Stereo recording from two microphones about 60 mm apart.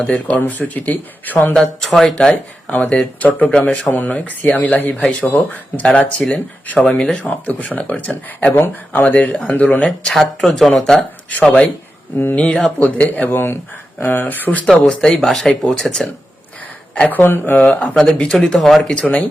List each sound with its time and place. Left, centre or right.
0.0 s speech: left
1.5 s speech: centre
2.3 s speech: left
6.1 s speech: centre
10.0 s speech: centre
13.0 s speech: left
14.8 s speech: centre
17.1 s speech: left
17.7 s speech: centre
18.9 s speech: centre